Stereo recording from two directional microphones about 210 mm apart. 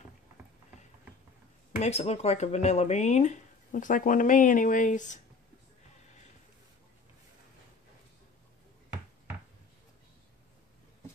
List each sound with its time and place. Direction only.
1.8 s speech: 30° left (ahead or behind)